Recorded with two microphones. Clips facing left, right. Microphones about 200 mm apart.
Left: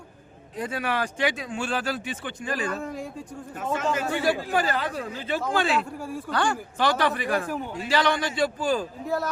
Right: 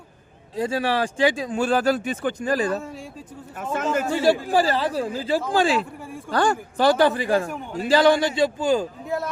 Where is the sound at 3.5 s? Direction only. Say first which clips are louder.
Right 2 dB; 50° right (ahead or behind).